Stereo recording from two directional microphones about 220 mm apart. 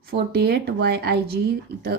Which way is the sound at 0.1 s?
45° right (ahead or behind).